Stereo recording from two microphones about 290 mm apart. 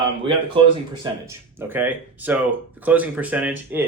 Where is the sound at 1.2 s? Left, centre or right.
Centre.